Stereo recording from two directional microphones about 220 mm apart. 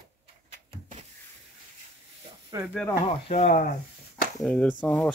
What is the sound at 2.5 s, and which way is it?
Speech, 15° right (ahead or behind).